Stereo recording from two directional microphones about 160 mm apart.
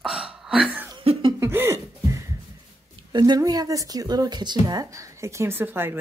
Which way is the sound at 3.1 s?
25° right (ahead or behind).